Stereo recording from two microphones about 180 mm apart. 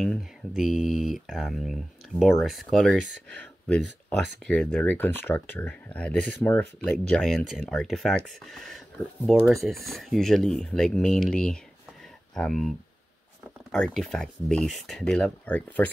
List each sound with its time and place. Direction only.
0.0 s speech: centre (ahead or behind)
3.0 s speech: 80° right
3.3 s speech: 5° left (ahead or behind)